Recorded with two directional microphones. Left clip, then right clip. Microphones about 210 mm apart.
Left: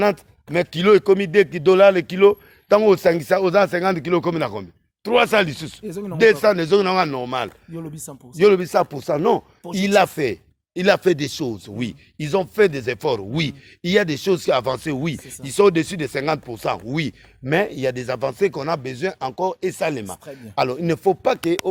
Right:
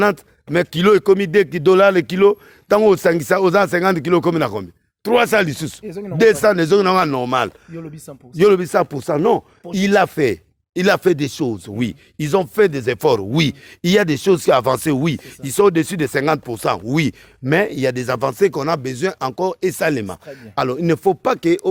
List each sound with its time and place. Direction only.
0.0 s speech: 45° right (ahead or behind)
5.8 s speech: 10° left (ahead or behind)
6.1 s speech: 50° right (ahead or behind)
7.8 s speech: 10° left (ahead or behind)
8.4 s speech: 45° right (ahead or behind)